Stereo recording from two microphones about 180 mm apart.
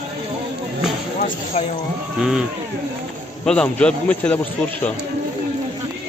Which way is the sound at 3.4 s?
5° left (ahead or behind).